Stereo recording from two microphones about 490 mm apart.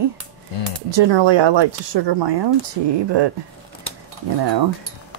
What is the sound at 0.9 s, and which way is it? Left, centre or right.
Speech, right.